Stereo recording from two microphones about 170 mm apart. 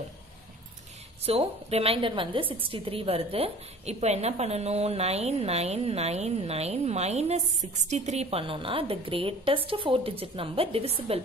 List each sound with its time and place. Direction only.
1.2 s a woman's voice: 35° right (ahead or behind)